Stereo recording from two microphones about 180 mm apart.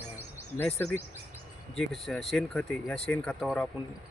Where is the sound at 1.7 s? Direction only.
Centre (ahead or behind).